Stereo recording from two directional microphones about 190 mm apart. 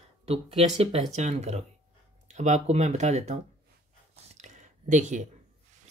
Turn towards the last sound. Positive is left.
turn(degrees=-40)  # may be behind; listen again after turning